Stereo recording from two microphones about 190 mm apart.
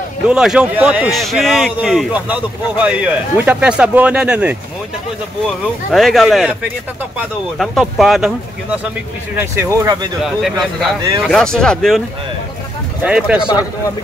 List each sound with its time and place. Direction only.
0.3 s speech: 5° right (ahead or behind)
5.9 s speech: centre (ahead or behind)
9.4 s speech: 15° right (ahead or behind)
10.2 s speech: centre (ahead or behind)
13.0 s speech: 5° right (ahead or behind)
13.5 s speech: 20° left (ahead or behind)